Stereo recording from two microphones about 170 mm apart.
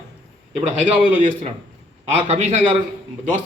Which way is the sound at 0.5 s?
45° right (ahead or behind).